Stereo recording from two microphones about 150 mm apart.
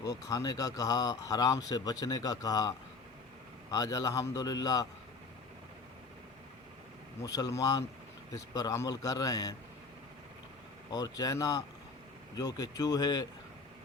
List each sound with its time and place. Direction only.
0.0 s speech: 25° left (ahead or behind)
7.2 s speech: 25° left (ahead or behind)
10.9 s speech: 25° left (ahead or behind)